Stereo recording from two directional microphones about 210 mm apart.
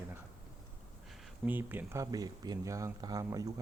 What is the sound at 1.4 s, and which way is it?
Speech, 10° right (ahead or behind).